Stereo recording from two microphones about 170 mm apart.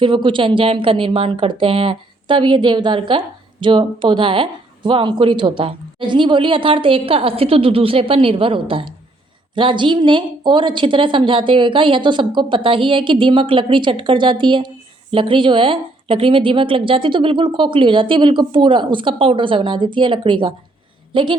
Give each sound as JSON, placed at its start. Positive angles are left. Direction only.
{"t": 0.0, "sound": "a woman's voice", "side_deg": -30}